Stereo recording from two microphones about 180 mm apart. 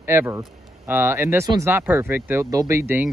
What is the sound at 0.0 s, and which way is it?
Speech, 15° right (ahead or behind).